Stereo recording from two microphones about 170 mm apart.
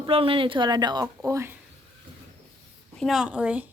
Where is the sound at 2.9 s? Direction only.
Centre (ahead or behind).